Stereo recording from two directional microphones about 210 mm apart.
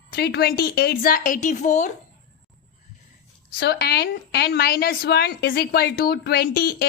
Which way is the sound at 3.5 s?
50° left (ahead or behind).